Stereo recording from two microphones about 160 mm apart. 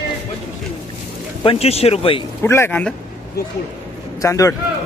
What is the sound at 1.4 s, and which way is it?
Speech, 40° left (ahead or behind).